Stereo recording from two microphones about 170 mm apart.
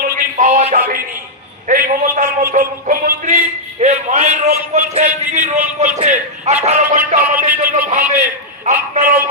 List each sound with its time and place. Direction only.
0.0 s music: 50° right (ahead or behind)
1.6 s a man's voice: 50° right (ahead or behind)